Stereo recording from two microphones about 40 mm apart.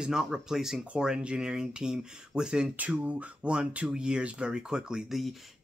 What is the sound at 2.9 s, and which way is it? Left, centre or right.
Speech, right.